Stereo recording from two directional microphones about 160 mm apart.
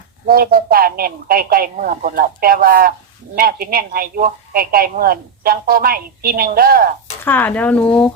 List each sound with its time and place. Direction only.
0.3 s speech: 65° right (ahead or behind)
7.3 s speech: 10° left (ahead or behind)